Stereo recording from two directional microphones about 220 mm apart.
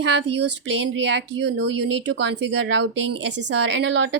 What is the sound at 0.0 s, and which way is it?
Speech, 50° right (ahead or behind).